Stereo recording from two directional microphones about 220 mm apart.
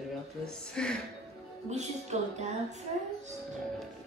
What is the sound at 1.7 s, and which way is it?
Speech, 30° right (ahead or behind).